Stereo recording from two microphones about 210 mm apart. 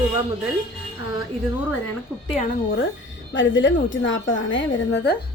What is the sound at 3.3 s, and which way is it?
A woman's voice, 60° left (ahead or behind).